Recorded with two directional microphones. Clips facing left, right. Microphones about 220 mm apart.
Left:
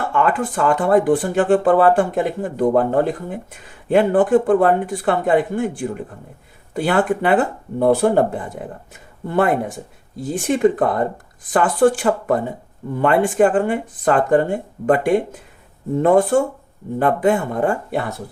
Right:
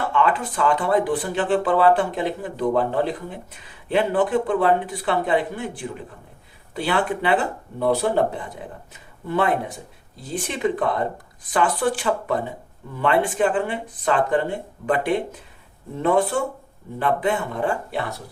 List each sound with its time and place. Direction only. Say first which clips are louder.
0.1 s speech: left 5 dB; 50° left (ahead or behind)